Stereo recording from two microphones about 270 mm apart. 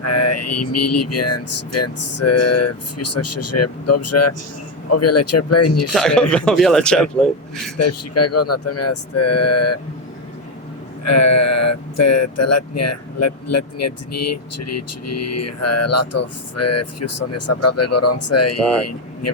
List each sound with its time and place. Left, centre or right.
0.0 s speech: left
5.9 s a man's voice: centre
7.8 s speech: left
11.0 s speech: left